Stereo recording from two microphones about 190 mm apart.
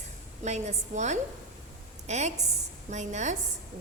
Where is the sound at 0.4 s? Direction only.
35° right (ahead or behind).